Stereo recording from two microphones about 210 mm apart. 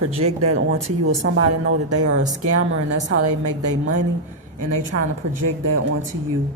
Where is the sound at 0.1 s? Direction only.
90° right.